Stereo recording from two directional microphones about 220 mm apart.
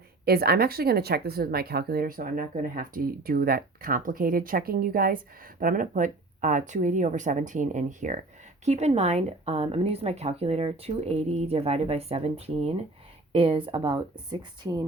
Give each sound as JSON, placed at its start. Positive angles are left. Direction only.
{"t": 0.3, "sound": "speech", "side_deg": -45}